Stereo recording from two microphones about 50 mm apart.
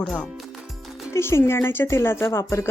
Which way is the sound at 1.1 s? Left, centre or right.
Left.